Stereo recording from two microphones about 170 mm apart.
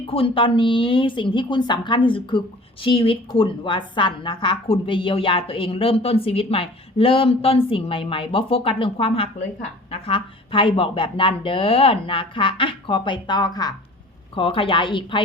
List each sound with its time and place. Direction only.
0.1 s a woman's voice: 30° left (ahead or behind)